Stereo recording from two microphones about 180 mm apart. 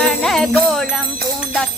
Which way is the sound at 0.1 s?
Centre (ahead or behind).